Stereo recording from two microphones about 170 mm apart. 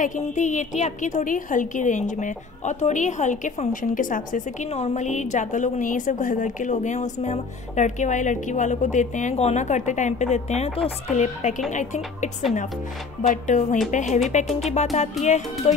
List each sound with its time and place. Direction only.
0.0 s a woman's voice: 45° left (ahead or behind)
14.7 s music: 40° left (ahead or behind)
15.2 s a woman's voice: 45° left (ahead or behind)